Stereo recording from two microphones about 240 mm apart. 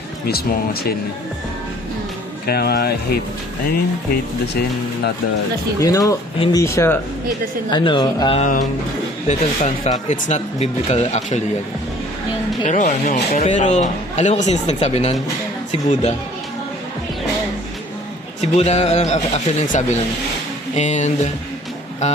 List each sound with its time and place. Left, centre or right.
0.3 s speech: left
2.5 s speech: left
5.8 s speech: centre
12.6 s speech: left
18.3 s speech: left
22.0 s music: left